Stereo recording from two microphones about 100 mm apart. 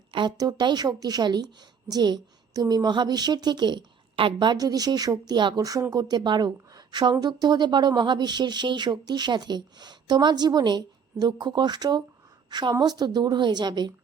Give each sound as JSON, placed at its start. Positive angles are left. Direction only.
{"t": 0.1, "sound": "a woman's voice", "side_deg": -50}